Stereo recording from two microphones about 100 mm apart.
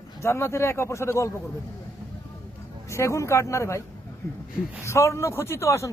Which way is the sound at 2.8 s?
30° left (ahead or behind).